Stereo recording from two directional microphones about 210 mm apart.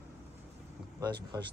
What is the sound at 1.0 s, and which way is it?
Speech, 20° right (ahead or behind).